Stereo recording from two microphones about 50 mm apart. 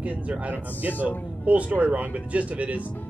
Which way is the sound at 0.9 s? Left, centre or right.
Left.